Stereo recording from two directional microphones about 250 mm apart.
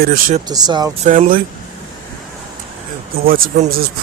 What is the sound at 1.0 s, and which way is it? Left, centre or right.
Speech, right.